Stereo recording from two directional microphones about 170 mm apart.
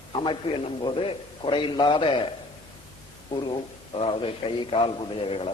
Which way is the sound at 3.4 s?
30° left (ahead or behind).